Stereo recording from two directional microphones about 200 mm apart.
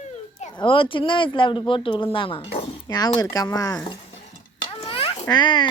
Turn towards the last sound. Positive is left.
turn(degrees=25)  # may be behind; listen again after turning